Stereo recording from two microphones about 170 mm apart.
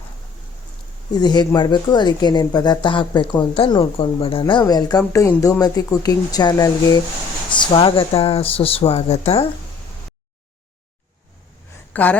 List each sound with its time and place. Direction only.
1.1 s speech: 25° left (ahead or behind)
11.9 s a woman's voice: 10° left (ahead or behind)